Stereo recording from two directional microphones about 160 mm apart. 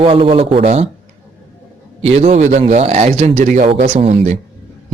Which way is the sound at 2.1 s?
45° right (ahead or behind).